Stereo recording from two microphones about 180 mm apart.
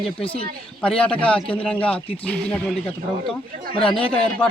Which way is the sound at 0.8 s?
5° left (ahead or behind).